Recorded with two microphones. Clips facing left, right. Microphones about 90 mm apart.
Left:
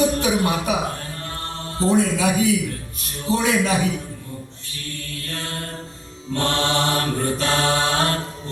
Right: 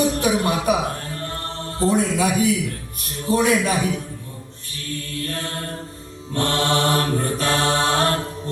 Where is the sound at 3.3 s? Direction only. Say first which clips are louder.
Right 2 dB; 50° right (ahead or behind).